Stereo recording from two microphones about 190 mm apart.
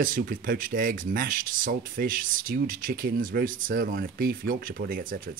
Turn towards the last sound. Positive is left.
turn(degrees=-50)  # may be behind; listen again after turning